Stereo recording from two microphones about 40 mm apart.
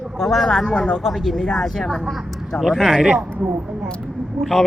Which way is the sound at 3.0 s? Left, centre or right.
Centre.